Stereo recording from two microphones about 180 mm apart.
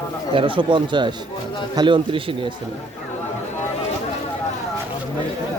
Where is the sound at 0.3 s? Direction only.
30° right (ahead or behind).